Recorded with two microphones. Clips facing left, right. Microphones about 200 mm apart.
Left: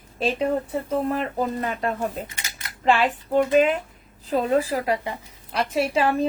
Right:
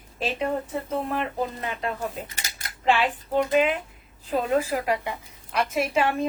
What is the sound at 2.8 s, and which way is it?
A woman's voice, 45° left (ahead or behind).